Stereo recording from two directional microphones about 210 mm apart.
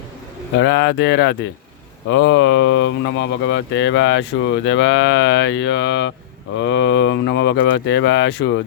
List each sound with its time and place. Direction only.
0.6 s speech: 60° left (ahead or behind)